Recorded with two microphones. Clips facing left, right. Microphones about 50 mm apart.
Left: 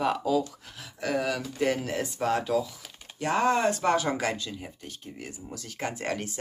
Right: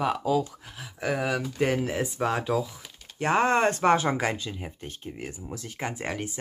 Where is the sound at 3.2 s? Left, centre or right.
Right.